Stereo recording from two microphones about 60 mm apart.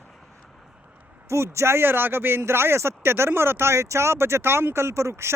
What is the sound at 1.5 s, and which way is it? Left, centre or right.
Speech, right.